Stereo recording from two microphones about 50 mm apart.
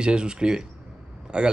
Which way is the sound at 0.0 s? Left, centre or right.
Centre.